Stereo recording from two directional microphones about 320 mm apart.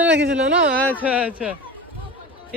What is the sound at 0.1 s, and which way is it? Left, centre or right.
Speech, right.